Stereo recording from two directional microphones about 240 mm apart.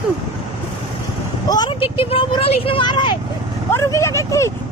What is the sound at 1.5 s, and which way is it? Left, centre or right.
Speech, centre.